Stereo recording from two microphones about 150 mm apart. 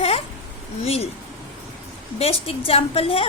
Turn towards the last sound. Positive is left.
turn(degrees=40)  # may be behind; listen again after turning